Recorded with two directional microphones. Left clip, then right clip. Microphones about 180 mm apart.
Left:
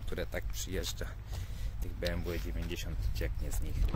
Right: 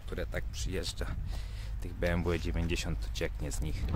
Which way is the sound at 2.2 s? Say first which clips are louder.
Right 6 dB; 40° right (ahead or behind).